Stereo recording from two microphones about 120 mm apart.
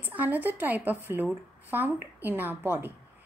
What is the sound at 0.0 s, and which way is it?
A woman's voice, 15° right (ahead or behind).